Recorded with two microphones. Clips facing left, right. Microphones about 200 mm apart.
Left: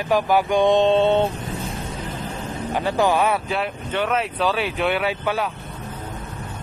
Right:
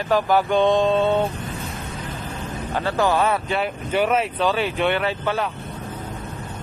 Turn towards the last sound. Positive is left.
turn(degrees=10)  # may be behind; listen again after turning